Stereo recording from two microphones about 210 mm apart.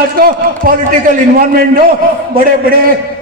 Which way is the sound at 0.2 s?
40° right (ahead or behind).